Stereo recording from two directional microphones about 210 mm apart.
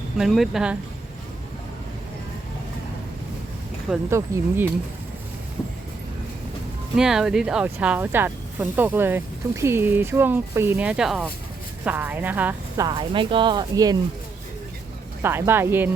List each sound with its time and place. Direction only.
0.2 s speech: centre (ahead or behind)
3.8 s speech: 10° right (ahead or behind)
6.9 s speech: 5° right (ahead or behind); by 14.0 s 20° right (ahead or behind)
15.2 s speech: 10° right (ahead or behind)